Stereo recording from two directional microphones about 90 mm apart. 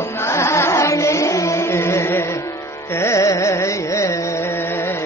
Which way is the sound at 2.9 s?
30° left (ahead or behind).